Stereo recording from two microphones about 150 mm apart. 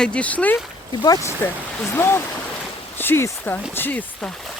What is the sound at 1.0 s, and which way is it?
Speech, 25° left (ahead or behind).